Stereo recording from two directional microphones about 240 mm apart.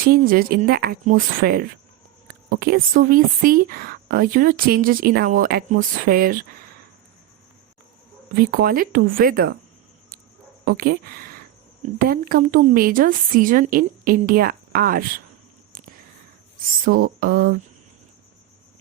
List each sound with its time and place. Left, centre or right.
0.0 s speech: right
8.4 s speech: right
10.7 s speech: right
16.8 s speech: right